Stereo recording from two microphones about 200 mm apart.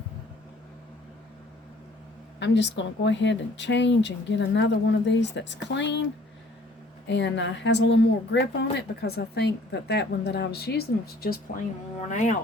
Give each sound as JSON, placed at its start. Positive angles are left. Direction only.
{"t": 2.4, "sound": "speech", "side_deg": 60}
{"t": 7.1, "sound": "speech", "side_deg": 65}
{"t": 12.1, "sound": "speech", "side_deg": 35}